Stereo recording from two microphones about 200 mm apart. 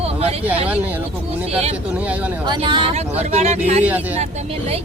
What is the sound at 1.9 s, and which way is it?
Speech, 5° right (ahead or behind).